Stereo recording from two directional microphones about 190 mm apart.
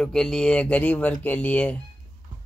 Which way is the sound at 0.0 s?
5° left (ahead or behind).